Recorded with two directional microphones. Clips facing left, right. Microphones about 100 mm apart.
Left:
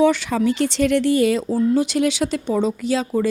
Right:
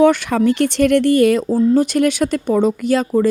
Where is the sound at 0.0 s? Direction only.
55° right (ahead or behind).